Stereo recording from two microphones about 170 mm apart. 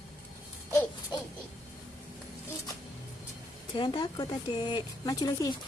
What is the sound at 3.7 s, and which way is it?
Speech, 30° left (ahead or behind).